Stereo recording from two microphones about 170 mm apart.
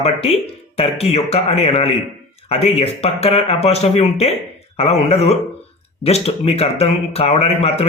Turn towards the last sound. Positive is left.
turn(degrees=35)  # may be behind; listen again after turning